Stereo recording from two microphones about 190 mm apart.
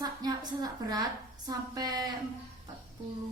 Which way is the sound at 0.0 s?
20° right (ahead or behind).